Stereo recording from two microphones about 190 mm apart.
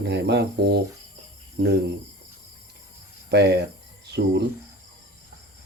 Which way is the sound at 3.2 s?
60° right (ahead or behind).